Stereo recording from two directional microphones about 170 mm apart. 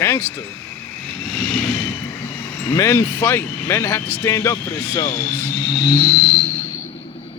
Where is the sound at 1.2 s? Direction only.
5° left (ahead or behind).